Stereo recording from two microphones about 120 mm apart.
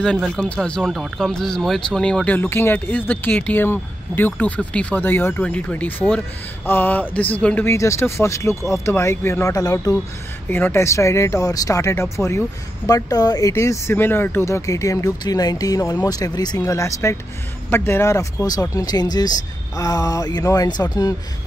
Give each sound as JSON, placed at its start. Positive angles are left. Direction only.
{"t": 0.0, "sound": "speech", "side_deg": 5}
{"t": 10.5, "sound": "speech", "side_deg": 20}